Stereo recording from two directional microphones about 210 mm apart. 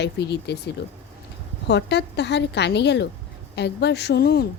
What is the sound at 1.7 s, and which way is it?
A woman's voice, 55° left (ahead or behind).